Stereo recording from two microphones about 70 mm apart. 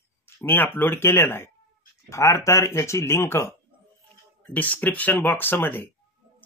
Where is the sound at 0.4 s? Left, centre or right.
Left.